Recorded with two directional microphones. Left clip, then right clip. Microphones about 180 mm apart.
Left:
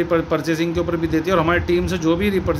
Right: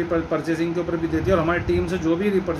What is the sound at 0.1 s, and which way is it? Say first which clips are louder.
A man's voice: left 4 dB; 50° left (ahead or behind).